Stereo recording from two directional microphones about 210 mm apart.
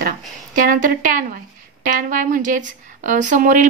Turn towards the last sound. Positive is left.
turn(degrees=-35)  # may be behind; listen again after turning